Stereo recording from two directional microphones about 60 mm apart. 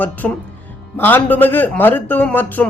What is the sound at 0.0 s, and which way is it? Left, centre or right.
Speech, left.